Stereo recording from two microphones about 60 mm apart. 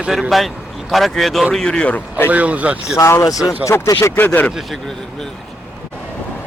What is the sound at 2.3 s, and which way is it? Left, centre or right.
Speech, right.